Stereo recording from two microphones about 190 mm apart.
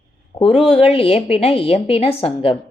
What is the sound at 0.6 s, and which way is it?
Speech, 30° left (ahead or behind).